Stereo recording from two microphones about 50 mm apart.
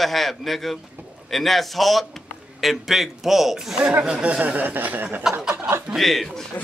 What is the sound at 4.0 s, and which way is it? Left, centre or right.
Speech, right.